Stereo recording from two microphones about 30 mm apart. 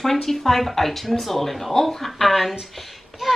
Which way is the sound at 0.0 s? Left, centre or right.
Centre.